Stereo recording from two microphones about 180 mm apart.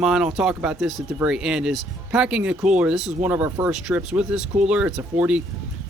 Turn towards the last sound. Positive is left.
turn(degrees=-5)  # may be behind; listen again after turning